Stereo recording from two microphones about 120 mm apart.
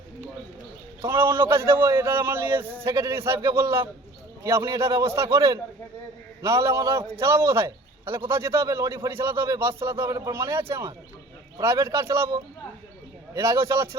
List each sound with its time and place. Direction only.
1.3 s a man's voice: 20° right (ahead or behind)
13.3 s a man's voice: 25° right (ahead or behind)